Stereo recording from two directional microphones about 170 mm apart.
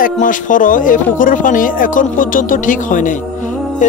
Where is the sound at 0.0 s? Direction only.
50° left (ahead or behind).